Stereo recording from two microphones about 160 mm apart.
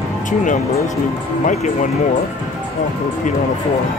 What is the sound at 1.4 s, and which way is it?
Speech, 50° left (ahead or behind).